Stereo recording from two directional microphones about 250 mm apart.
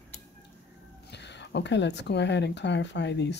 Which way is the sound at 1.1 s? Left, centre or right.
Left.